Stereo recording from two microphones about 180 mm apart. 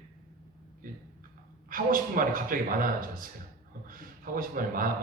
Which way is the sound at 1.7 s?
50° right (ahead or behind).